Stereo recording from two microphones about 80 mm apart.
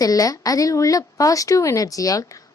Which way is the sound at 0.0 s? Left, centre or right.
Left.